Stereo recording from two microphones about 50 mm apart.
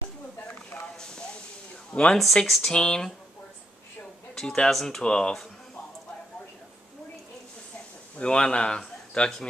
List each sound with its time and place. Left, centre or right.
0.9 s hiss: centre
1.9 s speech: centre
2.4 s speech: centre
2.7 s speech: centre
4.4 s speech: centre
8.2 s a man's voice: centre